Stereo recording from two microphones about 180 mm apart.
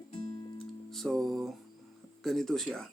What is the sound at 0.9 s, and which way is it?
Music, centre (ahead or behind).